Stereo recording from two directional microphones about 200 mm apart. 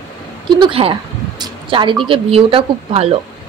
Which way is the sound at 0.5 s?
25° right (ahead or behind).